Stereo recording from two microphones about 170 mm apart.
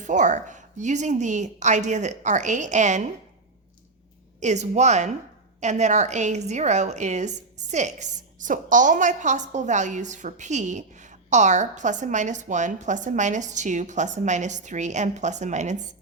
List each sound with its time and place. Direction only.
0.0 s a woman's voice: 45° right (ahead or behind)
4.4 s a woman's voice: 45° right (ahead or behind)